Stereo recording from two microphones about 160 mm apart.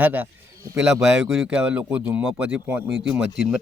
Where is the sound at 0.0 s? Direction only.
10° right (ahead or behind).